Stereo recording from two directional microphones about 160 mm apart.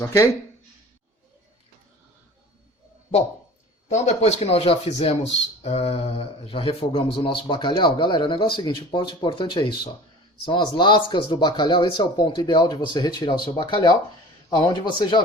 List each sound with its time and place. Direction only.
3.8 s speech: 45° left (ahead or behind); by 15.2 s 30° left (ahead or behind)